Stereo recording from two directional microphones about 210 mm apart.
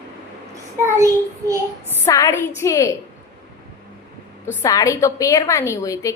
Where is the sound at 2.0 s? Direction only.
15° left (ahead or behind).